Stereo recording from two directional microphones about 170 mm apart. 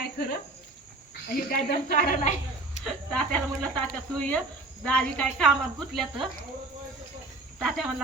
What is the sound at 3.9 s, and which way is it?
Speech, 5° left (ahead or behind).